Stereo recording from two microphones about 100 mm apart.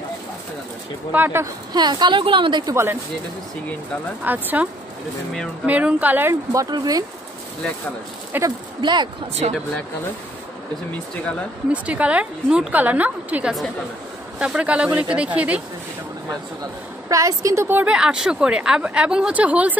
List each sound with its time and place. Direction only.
1.1 s a woman's voice: 20° right (ahead or behind)
1.7 s a woman's voice: 45° right (ahead or behind)
2.7 s speech: 25° right (ahead or behind)
4.2 s a woman's voice: 15° right (ahead or behind)
5.7 s a woman's voice: 15° right (ahead or behind)
6.7 s a woman's voice: 40° right (ahead or behind)
8.5 s a woman's voice: 50° right (ahead or behind)
9.4 s speech: 90° right
11.7 s a woman's voice: 15° right (ahead or behind)
17.1 s a woman's voice: 35° right (ahead or behind)
17.6 s speech: 20° right (ahead or behind)
17.9 s a woman's voice: 5° right (ahead or behind)